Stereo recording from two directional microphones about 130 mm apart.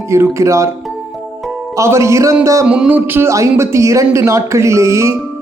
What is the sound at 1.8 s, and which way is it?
Speech, 20° right (ahead or behind).